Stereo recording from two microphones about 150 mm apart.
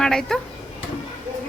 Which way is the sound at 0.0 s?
5° left (ahead or behind).